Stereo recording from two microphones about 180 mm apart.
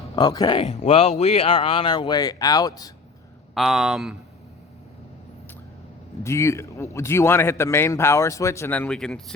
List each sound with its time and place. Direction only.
0.2 s speech: 25° left (ahead or behind)
0.6 s speech: 35° left (ahead or behind)
3.5 s speech: centre (ahead or behind)
6.2 s a man's voice: 15° left (ahead or behind)